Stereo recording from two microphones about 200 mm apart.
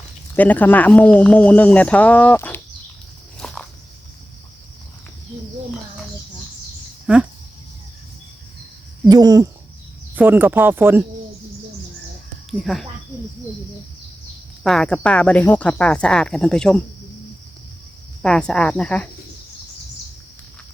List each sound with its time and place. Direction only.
0.3 s speech: 10° left (ahead or behind)
3.4 s walk: centre (ahead or behind)
7.1 s speech: 5° right (ahead or behind)
9.0 s speech: 20° right (ahead or behind)
12.5 s speech: centre (ahead or behind)
14.6 s speech: 5° left (ahead or behind)
18.2 s speech: 5° left (ahead or behind)